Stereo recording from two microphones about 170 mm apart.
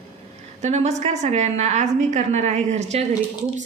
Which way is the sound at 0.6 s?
40° right (ahead or behind).